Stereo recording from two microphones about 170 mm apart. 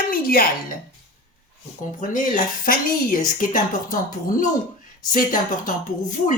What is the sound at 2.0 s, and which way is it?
Speech, 50° left (ahead or behind).